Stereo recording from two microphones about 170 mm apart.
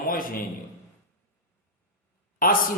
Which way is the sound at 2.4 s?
55° left (ahead or behind).